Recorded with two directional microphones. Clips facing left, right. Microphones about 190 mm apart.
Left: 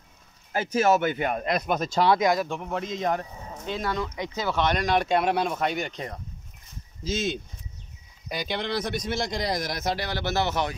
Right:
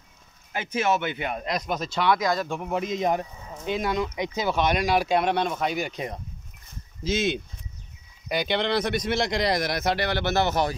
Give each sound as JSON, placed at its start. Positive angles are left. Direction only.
{"t": 0.5, "sound": "speech", "side_deg": 40}
{"t": 2.0, "sound": "speech", "side_deg": 30}
{"t": 2.4, "sound": "speech", "side_deg": -10}
{"t": 7.0, "sound": "speech", "side_deg": -65}